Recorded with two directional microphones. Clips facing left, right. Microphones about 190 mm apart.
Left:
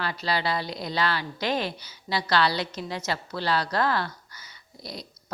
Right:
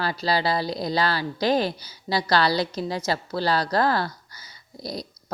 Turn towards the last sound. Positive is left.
turn(degrees=-35)  # may be behind; listen again after turning